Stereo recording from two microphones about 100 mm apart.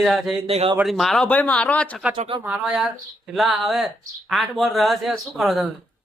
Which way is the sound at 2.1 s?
70° right (ahead or behind).